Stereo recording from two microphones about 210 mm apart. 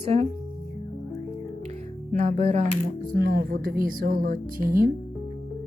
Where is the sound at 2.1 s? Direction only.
35° right (ahead or behind).